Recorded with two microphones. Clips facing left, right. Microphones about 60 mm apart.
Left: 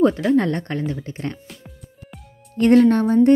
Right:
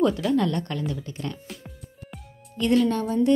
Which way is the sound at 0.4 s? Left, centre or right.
Left.